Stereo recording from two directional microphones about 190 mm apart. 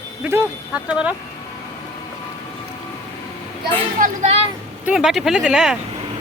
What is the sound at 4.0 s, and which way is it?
Speech, 35° right (ahead or behind).